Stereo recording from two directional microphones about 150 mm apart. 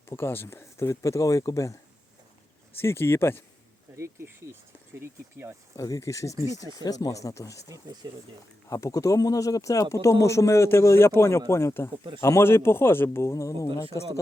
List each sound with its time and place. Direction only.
0.0 s speech: 15° left (ahead or behind)
2.8 s speech: 15° left (ahead or behind)
3.9 s speech: 20° right (ahead or behind)
5.7 s speech: 20° left (ahead or behind)
6.3 s speech: 20° right (ahead or behind)
6.8 s speech: 25° left (ahead or behind)
8.0 s speech: 30° right (ahead or behind)
8.7 s speech: 20° left (ahead or behind)